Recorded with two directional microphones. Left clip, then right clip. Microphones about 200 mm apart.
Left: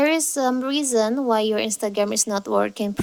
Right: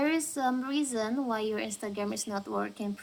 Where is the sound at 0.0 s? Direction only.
45° left (ahead or behind).